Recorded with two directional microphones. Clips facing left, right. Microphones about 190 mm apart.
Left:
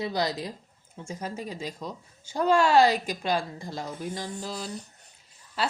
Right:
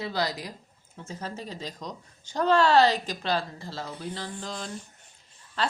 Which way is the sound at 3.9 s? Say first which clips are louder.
Left 2 dB; 45° left (ahead or behind).